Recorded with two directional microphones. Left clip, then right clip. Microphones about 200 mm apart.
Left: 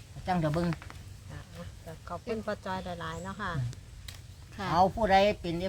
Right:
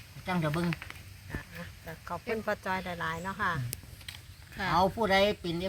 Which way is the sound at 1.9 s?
45° right (ahead or behind).